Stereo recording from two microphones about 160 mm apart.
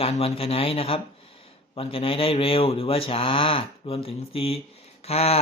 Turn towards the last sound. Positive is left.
turn(degrees=40)  # may be behind; listen again after turning